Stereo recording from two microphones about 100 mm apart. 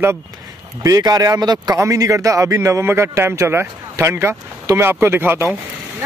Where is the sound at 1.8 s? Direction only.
30° right (ahead or behind).